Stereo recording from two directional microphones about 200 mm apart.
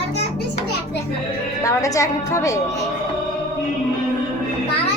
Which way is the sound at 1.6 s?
15° left (ahead or behind).